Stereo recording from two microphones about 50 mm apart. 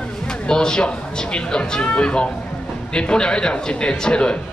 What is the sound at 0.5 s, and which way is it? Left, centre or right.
A man's voice, centre.